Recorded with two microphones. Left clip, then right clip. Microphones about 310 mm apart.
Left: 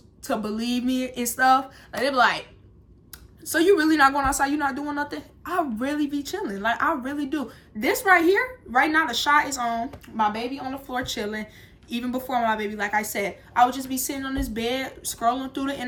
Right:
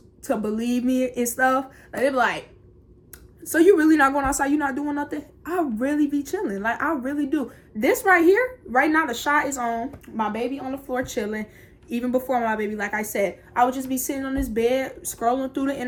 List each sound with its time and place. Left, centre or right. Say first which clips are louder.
0.3 s a woman's voice: right 2 dB; centre
3.5 s a woman's voice: right 3 dB; centre